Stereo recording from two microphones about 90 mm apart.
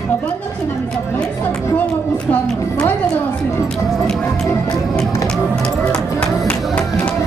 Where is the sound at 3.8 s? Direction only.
5° left (ahead or behind).